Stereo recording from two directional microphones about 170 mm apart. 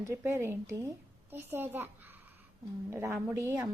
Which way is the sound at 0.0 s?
15° right (ahead or behind).